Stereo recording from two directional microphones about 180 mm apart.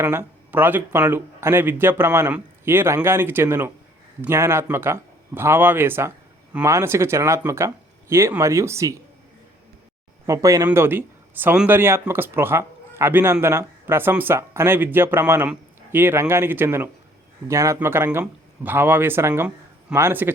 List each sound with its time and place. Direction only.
0.0 s speech: 15° right (ahead or behind)
10.2 s speech: 15° right (ahead or behind)